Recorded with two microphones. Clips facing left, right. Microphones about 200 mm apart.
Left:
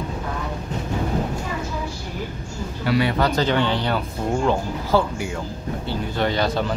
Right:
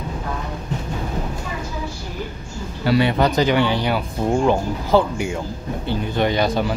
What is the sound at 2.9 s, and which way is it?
Speech, 25° right (ahead or behind).